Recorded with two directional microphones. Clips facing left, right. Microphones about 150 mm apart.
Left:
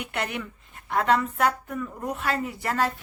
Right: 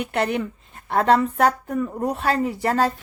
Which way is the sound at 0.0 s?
35° right (ahead or behind).